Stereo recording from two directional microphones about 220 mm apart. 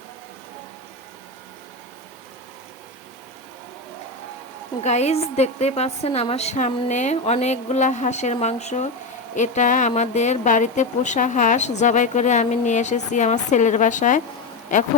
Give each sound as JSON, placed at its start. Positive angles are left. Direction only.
{"t": 4.8, "sound": "speech", "side_deg": 30}